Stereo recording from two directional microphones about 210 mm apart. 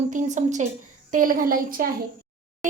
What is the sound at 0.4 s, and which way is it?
A child's voice, 35° right (ahead or behind).